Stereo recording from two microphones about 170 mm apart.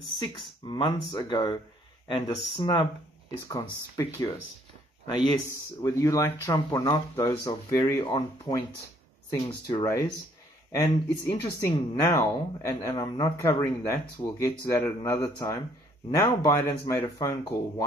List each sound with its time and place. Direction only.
0.7 s speech: 25° left (ahead or behind)
8.0 s speech: 25° left (ahead or behind)
9.7 s speech: 20° left (ahead or behind)